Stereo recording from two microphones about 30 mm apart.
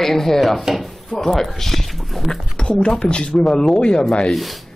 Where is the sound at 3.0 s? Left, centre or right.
Left.